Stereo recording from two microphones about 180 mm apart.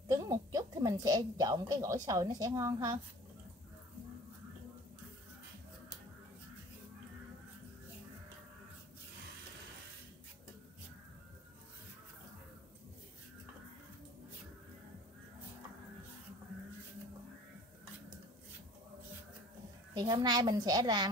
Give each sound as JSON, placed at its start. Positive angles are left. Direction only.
{"t": 0.1, "sound": "a woman's voice", "side_deg": -20}
{"t": 19.9, "sound": "a child's voice", "side_deg": -20}